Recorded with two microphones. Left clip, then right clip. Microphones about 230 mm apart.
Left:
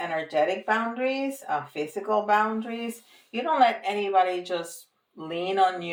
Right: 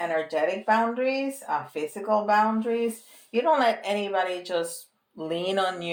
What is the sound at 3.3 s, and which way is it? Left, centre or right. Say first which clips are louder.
Speech: even; right.